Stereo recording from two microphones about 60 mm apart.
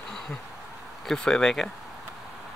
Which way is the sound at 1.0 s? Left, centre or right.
Centre.